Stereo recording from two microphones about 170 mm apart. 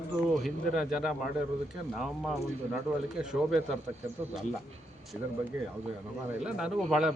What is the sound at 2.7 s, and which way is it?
Speech, 5° right (ahead or behind).